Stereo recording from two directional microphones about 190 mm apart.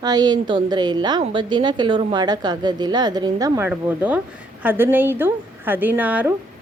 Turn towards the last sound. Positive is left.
turn(degrees=-10)  # may be behind; listen again after turning